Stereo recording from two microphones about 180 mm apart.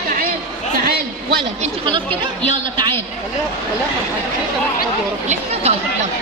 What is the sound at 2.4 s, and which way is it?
Speech, 30° right (ahead or behind).